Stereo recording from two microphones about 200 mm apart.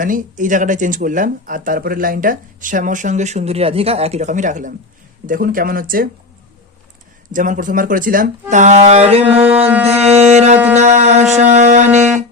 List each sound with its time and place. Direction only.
0.0 s speech: 40° right (ahead or behind)
7.3 s speech: 40° right (ahead or behind)
9.8 s music: 30° right (ahead or behind)